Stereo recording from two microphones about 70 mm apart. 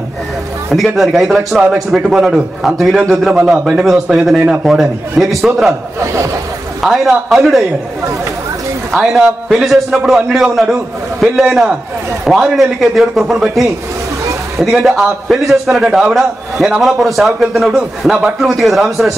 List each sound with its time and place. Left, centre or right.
0.7 s a man's voice: centre
5.9 s a sound: right
6.8 s a man's voice: centre
8.9 s a man's voice: centre